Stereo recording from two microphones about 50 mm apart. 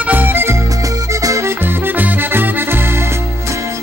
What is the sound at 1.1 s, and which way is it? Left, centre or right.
Music, right.